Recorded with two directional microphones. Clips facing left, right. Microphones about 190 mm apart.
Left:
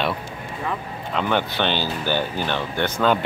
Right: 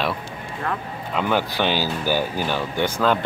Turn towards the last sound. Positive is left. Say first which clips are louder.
# even
turn(degrees=-10)  # may be behind; listen again after turning